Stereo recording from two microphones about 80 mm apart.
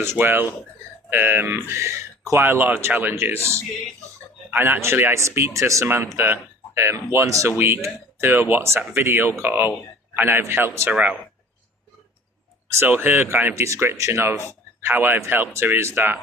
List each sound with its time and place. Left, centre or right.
0.0 s speech: right
4.5 s speech: right
10.9 s speech: centre
12.7 s speech: right